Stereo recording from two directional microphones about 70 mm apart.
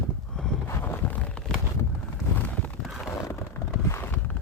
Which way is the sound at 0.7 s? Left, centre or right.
Left.